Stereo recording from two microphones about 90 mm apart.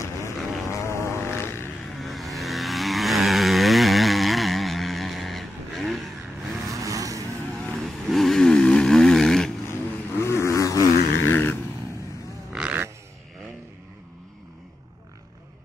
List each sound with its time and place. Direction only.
0.0 s vehicle: 35° left (ahead or behind)
2.0 s vehicle: centre (ahead or behind)
6.7 s vehicle: 40° right (ahead or behind)
7.5 s vehicle: 5° left (ahead or behind)
10.2 s vehicle: 35° left (ahead or behind)
11.2 s vehicle: 25° left (ahead or behind)